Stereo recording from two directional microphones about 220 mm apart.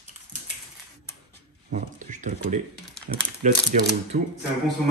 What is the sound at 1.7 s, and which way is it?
Speech, 35° right (ahead or behind).